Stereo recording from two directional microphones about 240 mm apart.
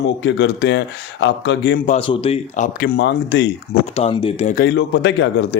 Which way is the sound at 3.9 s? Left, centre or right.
Left.